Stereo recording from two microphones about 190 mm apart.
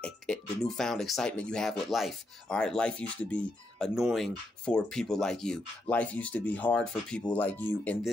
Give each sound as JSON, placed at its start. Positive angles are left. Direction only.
{"t": 0.0, "sound": "speech", "side_deg": 0}